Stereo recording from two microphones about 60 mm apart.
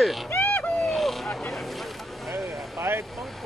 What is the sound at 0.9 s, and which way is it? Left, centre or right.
Vehicle, centre.